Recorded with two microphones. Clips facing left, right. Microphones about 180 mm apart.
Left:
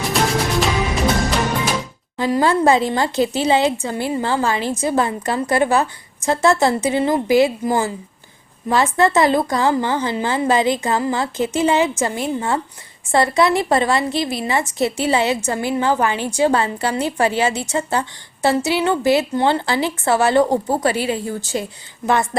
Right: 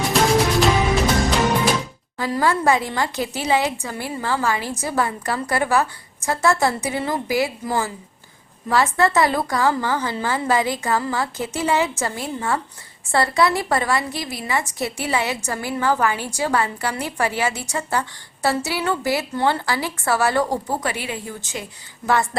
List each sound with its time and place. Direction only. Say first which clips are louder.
2.1 s a woman's voice: left 4 dB; 20° left (ahead or behind)
22.0 s a woman's voice: left 2 dB; 20° left (ahead or behind)